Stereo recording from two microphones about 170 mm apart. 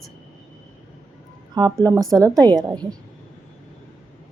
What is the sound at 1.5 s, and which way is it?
Speech, 25° right (ahead or behind).